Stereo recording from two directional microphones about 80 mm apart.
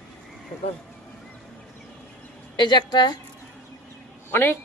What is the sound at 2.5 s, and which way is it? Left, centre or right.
Speech, left.